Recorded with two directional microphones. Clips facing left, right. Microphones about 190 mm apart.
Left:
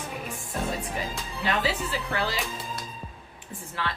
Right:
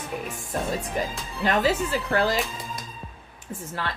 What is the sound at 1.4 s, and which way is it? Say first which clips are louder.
Speech: right 5 dB; 45° right (ahead or behind).